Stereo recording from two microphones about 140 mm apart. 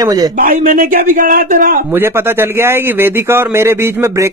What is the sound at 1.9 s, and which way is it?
A man's voice, 15° right (ahead or behind).